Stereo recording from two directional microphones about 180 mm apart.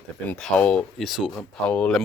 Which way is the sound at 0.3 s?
5° left (ahead or behind).